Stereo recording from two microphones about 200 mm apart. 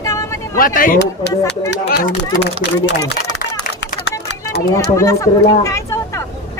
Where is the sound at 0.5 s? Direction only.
45° left (ahead or behind).